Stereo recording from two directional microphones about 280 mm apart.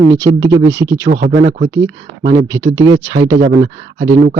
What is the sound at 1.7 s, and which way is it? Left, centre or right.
Speech, centre.